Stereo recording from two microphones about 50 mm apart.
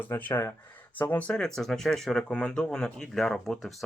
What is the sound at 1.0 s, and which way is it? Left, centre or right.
Speech, left.